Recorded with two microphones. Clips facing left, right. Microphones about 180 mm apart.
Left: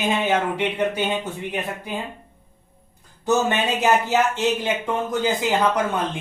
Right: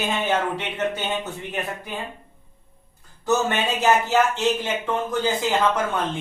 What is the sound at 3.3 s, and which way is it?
Speech, 15° left (ahead or behind).